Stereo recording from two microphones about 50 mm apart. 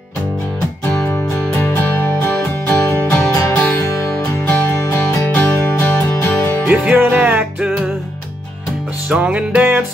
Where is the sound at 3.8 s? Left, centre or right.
Left.